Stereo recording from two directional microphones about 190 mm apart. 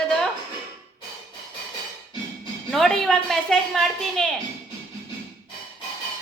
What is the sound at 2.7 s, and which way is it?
A woman's voice, centre (ahead or behind).